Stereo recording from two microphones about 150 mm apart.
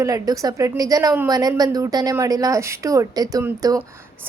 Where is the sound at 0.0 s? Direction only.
25° right (ahead or behind).